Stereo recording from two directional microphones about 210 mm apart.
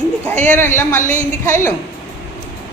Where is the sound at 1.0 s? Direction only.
35° left (ahead or behind).